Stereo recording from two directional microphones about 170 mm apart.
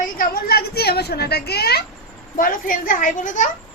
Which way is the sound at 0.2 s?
65° left (ahead or behind).